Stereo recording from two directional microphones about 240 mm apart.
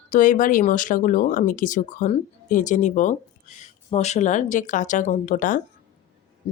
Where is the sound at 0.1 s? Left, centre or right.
Left.